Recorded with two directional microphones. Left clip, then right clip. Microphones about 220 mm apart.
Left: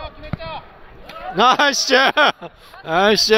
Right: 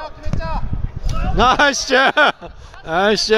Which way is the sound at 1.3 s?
Centre (ahead or behind).